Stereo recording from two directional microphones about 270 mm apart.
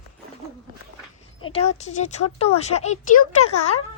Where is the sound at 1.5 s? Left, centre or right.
Left.